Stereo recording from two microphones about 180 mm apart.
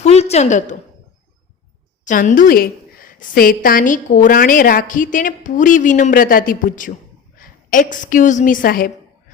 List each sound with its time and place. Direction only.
0.0 s a woman's voice: 35° left (ahead or behind)
2.0 s a woman's voice: 45° left (ahead or behind)